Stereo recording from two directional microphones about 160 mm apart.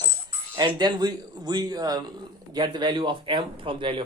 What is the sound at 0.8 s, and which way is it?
A man's voice, 25° right (ahead or behind).